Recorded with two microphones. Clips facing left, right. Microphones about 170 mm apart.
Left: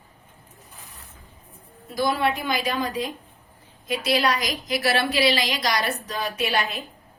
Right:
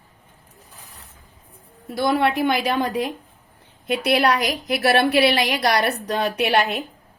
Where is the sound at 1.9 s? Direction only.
65° right (ahead or behind).